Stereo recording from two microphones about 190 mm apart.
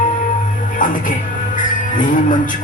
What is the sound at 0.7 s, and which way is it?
Music, 45° left (ahead or behind).